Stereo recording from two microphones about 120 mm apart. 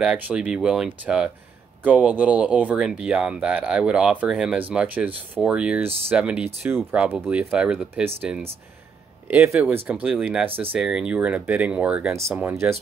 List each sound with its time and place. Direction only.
0.0 s speech: 10° right (ahead or behind)
9.3 s speech: 20° right (ahead or behind)
12.1 s speech: 25° right (ahead or behind)